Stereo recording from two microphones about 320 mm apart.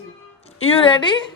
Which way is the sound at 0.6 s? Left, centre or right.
Centre.